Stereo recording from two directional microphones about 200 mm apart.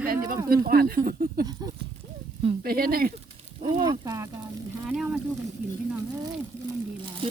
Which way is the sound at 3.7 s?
25° right (ahead or behind).